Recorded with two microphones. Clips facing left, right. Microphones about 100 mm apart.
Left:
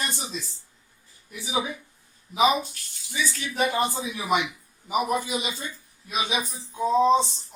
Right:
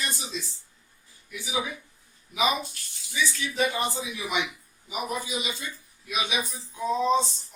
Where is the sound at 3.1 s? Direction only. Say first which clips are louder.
Even; 45° left (ahead or behind).